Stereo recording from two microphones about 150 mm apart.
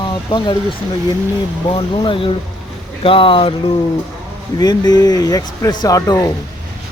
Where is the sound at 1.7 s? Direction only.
30° left (ahead or behind).